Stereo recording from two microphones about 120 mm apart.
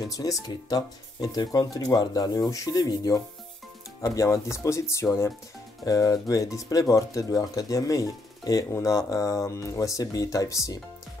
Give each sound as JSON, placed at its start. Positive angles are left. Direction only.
{"t": 0.0, "sound": "speech", "side_deg": 30}